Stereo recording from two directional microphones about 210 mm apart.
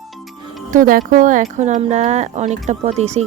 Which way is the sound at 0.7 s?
40° right (ahead or behind).